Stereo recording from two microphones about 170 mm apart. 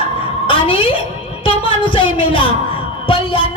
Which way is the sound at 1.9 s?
30° left (ahead or behind).